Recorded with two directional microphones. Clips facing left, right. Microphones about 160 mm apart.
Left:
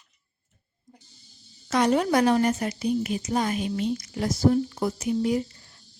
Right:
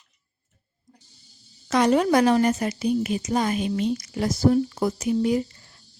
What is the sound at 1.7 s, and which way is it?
A woman's voice, 90° right.